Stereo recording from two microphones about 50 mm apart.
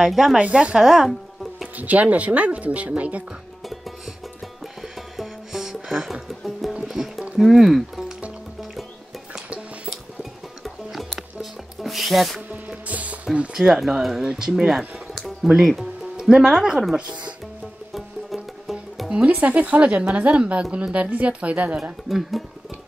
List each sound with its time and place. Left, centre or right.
0.0 s speech: centre
0.4 s speech: right
0.7 s music: centre
1.8 s speech: right
4.8 s music: centre
7.3 s speech: centre
9.3 s music: centre
10.6 s music: centre
12.4 s music: right
13.6 s speech: centre
17.0 s speech: right
17.9 s music: centre
19.0 s speech: right